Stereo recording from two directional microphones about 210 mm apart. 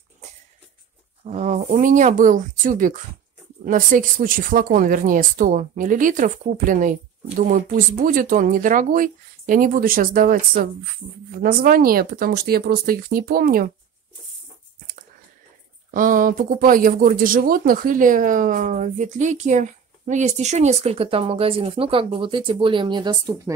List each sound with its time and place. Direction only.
1.2 s speech: 35° right (ahead or behind)
15.9 s speech: 40° right (ahead or behind); by 23.5 s 20° right (ahead or behind)